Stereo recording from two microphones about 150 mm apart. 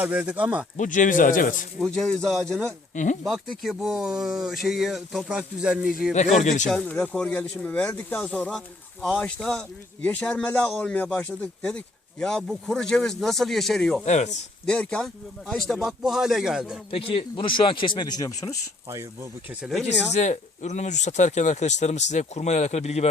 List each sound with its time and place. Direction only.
0.0 s speech: 10° right (ahead or behind)
0.8 s speech: 60° left (ahead or behind)
1.8 s speech: 5° left (ahead or behind)
2.9 s speech: 55° left (ahead or behind)
3.2 s speech: centre (ahead or behind)
6.1 s speech: 50° left (ahead or behind)
6.7 s speech: 10° left (ahead or behind)
14.0 s speech: 50° left (ahead or behind)
14.7 s speech: 5° left (ahead or behind)
16.9 s speech: 40° left (ahead or behind); by 18.5 s 20° left (ahead or behind)
19.6 s speech: centre (ahead or behind)
20.1 s speech: 50° left (ahead or behind)